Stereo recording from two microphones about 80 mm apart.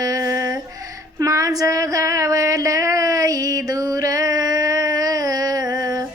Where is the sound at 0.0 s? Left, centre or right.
Right.